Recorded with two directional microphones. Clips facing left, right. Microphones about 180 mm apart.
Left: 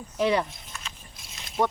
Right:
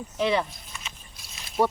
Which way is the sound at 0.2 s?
10° left (ahead or behind).